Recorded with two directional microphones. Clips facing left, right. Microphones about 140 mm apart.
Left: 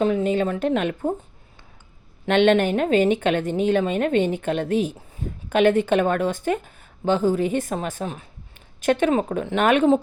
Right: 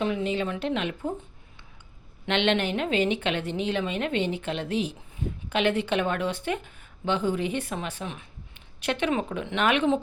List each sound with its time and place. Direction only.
0.0 s a woman's voice: 45° left (ahead or behind)
2.2 s a woman's voice: 45° left (ahead or behind)